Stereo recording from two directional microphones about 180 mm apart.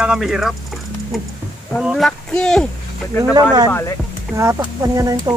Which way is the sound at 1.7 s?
Centre (ahead or behind).